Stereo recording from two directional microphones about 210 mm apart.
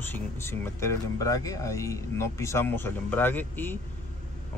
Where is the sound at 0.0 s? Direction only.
10° left (ahead or behind).